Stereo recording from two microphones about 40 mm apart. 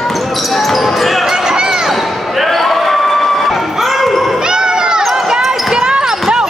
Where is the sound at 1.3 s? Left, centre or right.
Centre.